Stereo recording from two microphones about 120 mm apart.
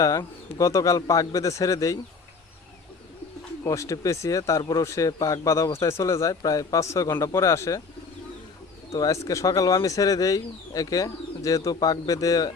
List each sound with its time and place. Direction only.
0.0 s speech: 25° left (ahead or behind)
3.6 s speech: 25° left (ahead or behind)
9.0 s speech: 30° left (ahead or behind)